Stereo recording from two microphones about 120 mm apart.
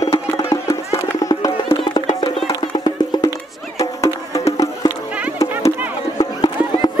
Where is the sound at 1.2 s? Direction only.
30° left (ahead or behind).